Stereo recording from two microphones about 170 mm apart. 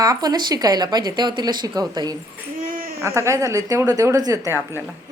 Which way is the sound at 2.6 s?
55° right (ahead or behind).